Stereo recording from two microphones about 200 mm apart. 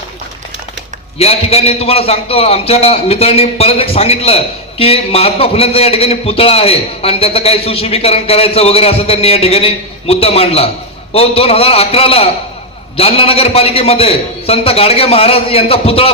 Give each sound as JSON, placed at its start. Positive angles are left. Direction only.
{"t": 1.2, "sound": "a man's voice", "side_deg": 30}